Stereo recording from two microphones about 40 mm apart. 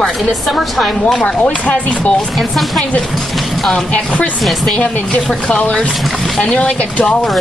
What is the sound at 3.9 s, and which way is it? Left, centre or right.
Speech, left.